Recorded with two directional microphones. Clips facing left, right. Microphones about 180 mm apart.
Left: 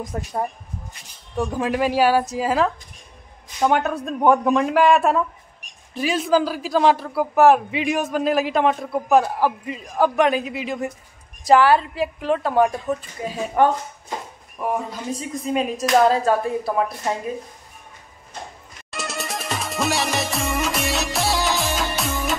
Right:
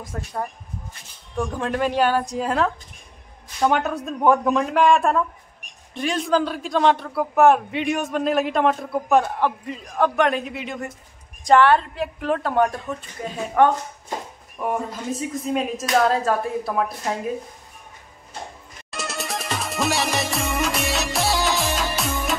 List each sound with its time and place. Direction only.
0.0 s speech: 20° left (ahead or behind)
1.4 s a man's voice: 10° left (ahead or behind)
14.6 s a man's voice: centre (ahead or behind)
18.9 s music: centre (ahead or behind)